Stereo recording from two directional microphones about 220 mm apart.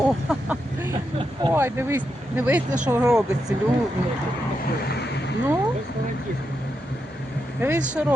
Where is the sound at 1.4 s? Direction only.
10° right (ahead or behind).